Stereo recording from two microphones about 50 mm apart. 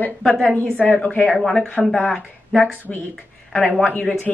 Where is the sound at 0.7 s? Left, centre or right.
Left.